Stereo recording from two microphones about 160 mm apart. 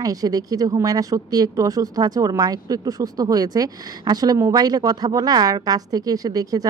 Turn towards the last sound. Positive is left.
turn(degrees=-25)  # may be behind; listen again after turning